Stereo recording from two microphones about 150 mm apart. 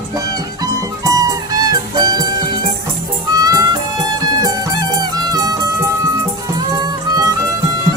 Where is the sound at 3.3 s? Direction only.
25° right (ahead or behind).